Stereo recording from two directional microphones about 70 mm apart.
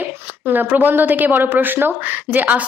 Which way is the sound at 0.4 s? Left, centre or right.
Right.